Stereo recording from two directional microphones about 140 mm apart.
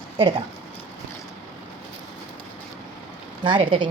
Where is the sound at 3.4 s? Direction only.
35° right (ahead or behind).